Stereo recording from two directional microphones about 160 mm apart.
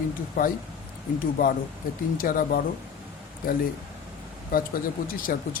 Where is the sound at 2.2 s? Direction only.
65° left (ahead or behind).